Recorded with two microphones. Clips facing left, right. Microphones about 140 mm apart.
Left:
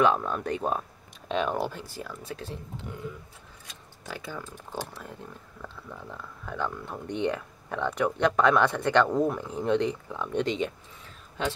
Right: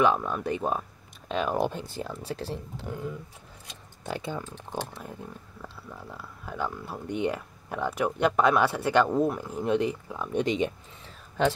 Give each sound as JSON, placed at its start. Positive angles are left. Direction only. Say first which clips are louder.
{"t": 0.0, "sound": "speech", "louder": "even", "side_deg": -5}
{"t": 1.6, "sound": "speech", "louder": "right 4 dB", "side_deg": -20}
{"t": 4.0, "sound": "speech", "louder": "right 5 dB", "side_deg": -25}